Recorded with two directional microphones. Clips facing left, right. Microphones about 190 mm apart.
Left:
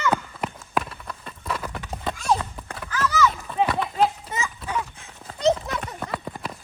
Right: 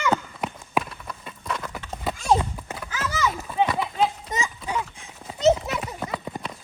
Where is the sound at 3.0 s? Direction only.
25° right (ahead or behind).